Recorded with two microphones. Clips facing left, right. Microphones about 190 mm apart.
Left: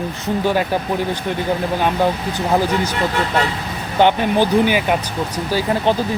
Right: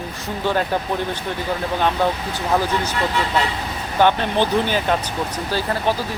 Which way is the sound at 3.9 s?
15° left (ahead or behind).